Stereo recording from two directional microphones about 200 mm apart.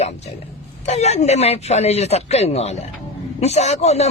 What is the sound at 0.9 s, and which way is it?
A man's voice, 35° left (ahead or behind).